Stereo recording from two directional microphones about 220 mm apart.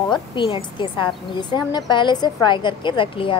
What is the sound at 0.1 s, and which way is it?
A woman's voice, 20° left (ahead or behind).